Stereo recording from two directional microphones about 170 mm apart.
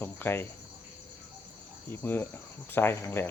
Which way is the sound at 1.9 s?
15° left (ahead or behind).